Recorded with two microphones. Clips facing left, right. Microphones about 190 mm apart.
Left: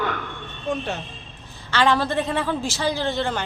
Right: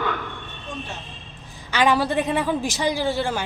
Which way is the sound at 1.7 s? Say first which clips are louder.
Right 1 dB; 15° right (ahead or behind).